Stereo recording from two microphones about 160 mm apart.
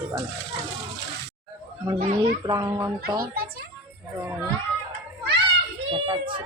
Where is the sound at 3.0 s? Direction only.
70° right (ahead or behind).